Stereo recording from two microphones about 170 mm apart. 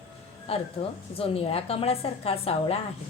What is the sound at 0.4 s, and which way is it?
A woman's voice, 35° left (ahead or behind).